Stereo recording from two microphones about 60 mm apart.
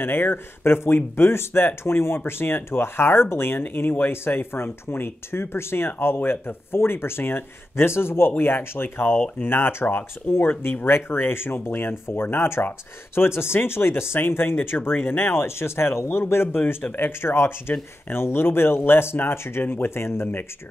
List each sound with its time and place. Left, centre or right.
0.0 s speech: left